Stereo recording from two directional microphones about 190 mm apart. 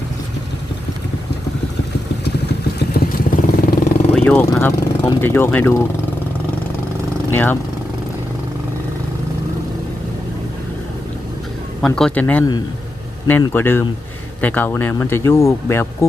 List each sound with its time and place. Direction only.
2.7 s vehicle: 50° left (ahead or behind)
4.1 s speech: 5° left (ahead or behind)
7.3 s speech: 10° left (ahead or behind)
11.8 s speech: 5° left (ahead or behind)